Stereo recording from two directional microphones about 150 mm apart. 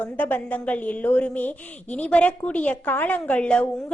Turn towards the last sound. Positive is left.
turn(degrees=10)  # may be behind; listen again after turning